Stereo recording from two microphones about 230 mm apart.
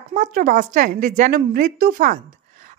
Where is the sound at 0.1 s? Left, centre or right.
Right.